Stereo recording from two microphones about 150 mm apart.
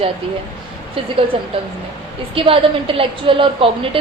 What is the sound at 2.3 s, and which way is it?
Speech, 35° right (ahead or behind).